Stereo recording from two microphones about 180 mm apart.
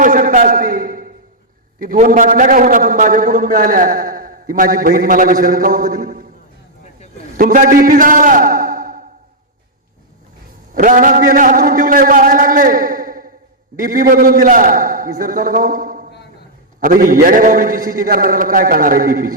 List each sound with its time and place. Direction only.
0.0 s a sound: 50° right (ahead or behind)
1.8 s a man's voice: 50° right (ahead or behind)
7.3 s a man's voice: 50° right (ahead or behind)
10.8 s a man's voice: 50° right (ahead or behind)